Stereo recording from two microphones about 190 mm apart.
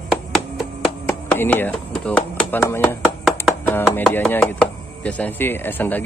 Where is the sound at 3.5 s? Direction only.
10° left (ahead or behind).